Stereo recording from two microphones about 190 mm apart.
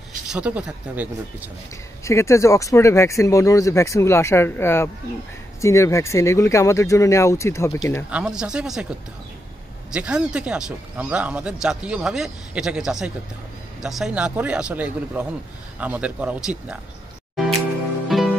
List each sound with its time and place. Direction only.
0.3 s speech: 5° right (ahead or behind)
2.0 s speech: 15° left (ahead or behind)
8.1 s speech: 5° right (ahead or behind)
9.8 s speech: 5° right (ahead or behind)
18.0 s music: centre (ahead or behind)